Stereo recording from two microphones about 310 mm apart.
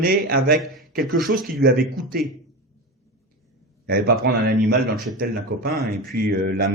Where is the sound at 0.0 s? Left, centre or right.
Right.